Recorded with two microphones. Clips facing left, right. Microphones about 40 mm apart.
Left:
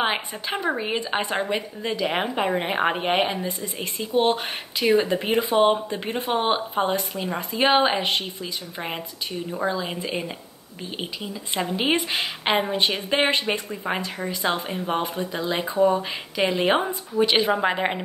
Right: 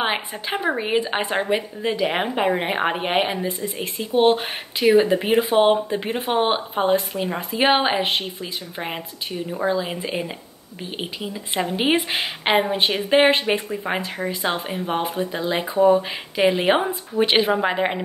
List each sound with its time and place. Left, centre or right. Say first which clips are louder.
0.0 s a woman's voice: right 1 dB; centre
17.1 s speech: right 1 dB; right
17.5 s speech: right 2 dB; centre